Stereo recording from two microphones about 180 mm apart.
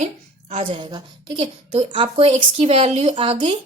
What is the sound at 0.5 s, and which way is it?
A woman's voice, 30° right (ahead or behind).